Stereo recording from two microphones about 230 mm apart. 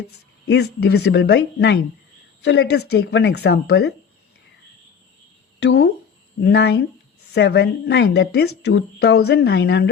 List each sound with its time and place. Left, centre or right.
0.4 s speech: left
5.6 s speech: left